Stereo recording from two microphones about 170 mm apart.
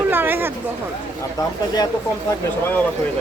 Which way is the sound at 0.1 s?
10° right (ahead or behind).